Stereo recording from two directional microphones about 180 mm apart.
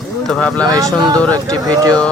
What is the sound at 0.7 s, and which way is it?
Speech, 20° right (ahead or behind).